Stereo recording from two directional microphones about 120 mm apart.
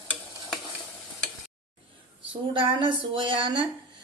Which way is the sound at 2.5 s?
45° right (ahead or behind).